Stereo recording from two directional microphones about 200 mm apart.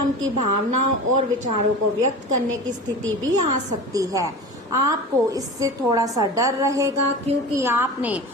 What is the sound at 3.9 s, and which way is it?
A woman's voice, 15° right (ahead or behind).